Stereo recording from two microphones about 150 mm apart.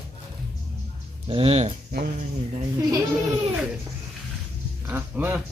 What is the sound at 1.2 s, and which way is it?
Speech, 40° right (ahead or behind).